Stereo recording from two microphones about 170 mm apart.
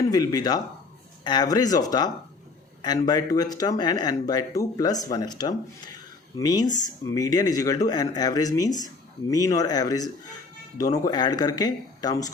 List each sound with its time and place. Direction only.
0.0 s speech: 20° left (ahead or behind)